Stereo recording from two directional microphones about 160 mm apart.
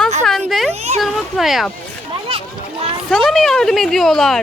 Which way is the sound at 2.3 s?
35° right (ahead or behind).